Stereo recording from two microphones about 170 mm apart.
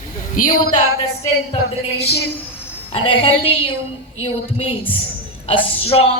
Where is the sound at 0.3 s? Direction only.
50° left (ahead or behind).